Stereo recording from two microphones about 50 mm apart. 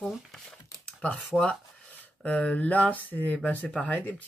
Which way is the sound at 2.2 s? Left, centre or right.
Left.